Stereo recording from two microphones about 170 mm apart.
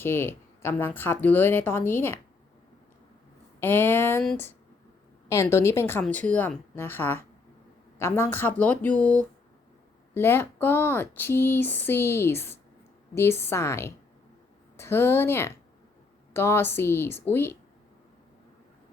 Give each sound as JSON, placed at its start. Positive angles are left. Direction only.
{"t": 0.0, "sound": "speech", "side_deg": 15}
{"t": 3.6, "sound": "speech", "side_deg": 15}
{"t": 5.3, "sound": "speech", "side_deg": 15}